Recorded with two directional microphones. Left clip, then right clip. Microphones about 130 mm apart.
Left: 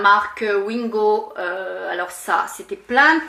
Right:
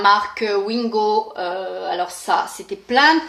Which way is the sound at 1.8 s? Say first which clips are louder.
Right 2 dB; 20° right (ahead or behind).